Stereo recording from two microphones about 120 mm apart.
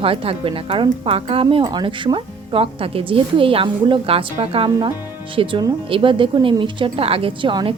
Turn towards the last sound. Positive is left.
turn(degrees=-45)  # may be behind; listen again after turning